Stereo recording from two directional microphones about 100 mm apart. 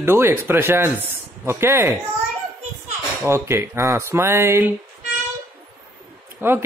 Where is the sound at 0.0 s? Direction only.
25° right (ahead or behind).